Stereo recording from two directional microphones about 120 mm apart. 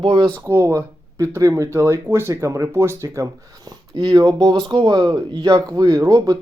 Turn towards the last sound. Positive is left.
turn(degrees=-30)  # may be behind; listen again after turning